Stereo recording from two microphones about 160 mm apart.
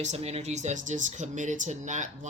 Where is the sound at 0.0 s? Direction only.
45° right (ahead or behind).